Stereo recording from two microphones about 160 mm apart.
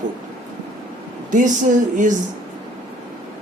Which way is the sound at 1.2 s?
50° right (ahead or behind).